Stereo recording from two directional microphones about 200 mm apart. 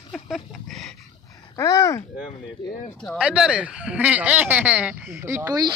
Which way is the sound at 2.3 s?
25° left (ahead or behind).